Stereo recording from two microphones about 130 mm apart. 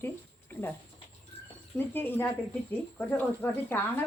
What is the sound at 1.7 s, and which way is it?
Speech, 15° left (ahead or behind).